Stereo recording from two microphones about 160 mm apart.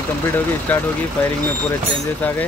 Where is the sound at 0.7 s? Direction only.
10° left (ahead or behind).